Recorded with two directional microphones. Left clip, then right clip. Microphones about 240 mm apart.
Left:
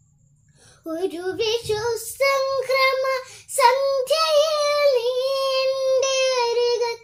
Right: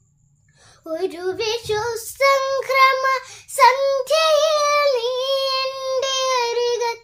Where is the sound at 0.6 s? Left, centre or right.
Centre.